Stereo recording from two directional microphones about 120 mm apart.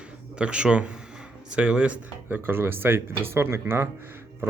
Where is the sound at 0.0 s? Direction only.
10° right (ahead or behind).